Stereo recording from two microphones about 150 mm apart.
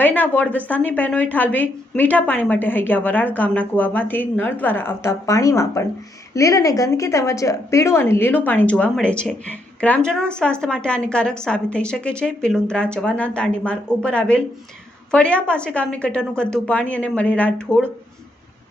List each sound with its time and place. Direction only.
0.0 s a woman's voice: 10° left (ahead or behind)